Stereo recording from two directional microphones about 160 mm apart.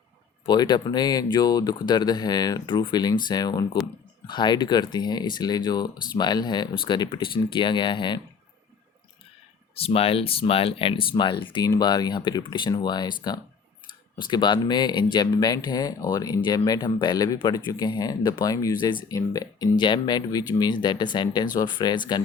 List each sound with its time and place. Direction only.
0.4 s speech: 25° left (ahead or behind)
9.7 s speech: 35° left (ahead or behind)